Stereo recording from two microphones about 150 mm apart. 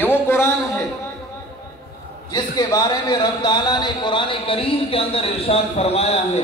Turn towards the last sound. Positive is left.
turn(degrees=45)  # may be behind; listen again after turning